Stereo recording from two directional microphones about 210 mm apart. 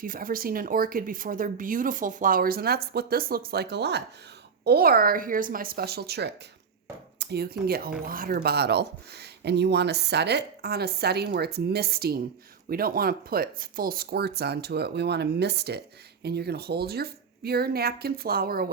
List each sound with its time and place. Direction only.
0.0 s speech: 40° right (ahead or behind)